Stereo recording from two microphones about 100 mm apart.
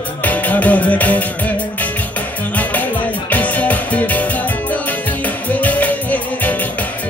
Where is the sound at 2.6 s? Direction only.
15° left (ahead or behind).